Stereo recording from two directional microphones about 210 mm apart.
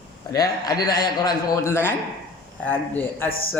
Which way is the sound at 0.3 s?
20° left (ahead or behind).